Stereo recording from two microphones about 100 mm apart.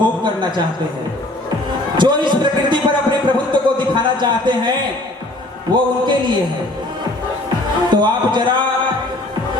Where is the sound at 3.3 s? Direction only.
50° right (ahead or behind).